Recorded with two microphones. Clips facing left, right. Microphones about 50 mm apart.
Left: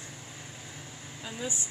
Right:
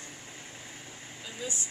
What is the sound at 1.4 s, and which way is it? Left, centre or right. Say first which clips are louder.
Speech: left 1 dB; left.